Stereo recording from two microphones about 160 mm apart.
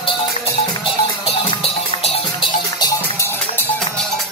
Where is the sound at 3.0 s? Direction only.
15° left (ahead or behind).